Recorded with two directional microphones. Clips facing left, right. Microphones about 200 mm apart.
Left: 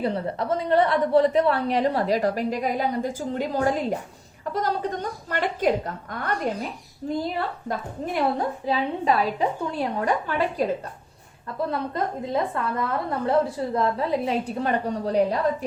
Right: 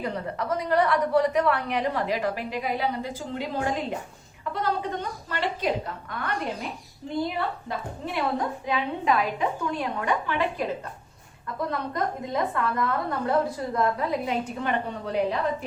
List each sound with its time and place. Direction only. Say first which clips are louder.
0.0 s a woman's voice: left 4 dB; 30° left (ahead or behind)
11.7 s a woman's voice: even; 30° left (ahead or behind)